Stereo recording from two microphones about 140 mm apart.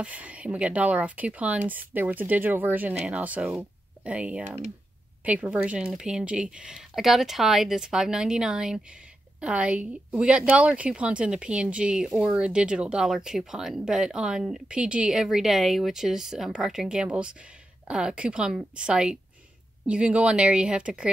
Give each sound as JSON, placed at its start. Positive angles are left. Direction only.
{"t": 0.0, "sound": "speech", "side_deg": -10}
{"t": 4.5, "sound": "speech", "side_deg": -60}
{"t": 5.2, "sound": "a woman's voice", "side_deg": -10}